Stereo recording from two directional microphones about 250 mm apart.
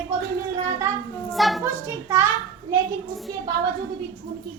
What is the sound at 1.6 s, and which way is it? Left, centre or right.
Speech, centre.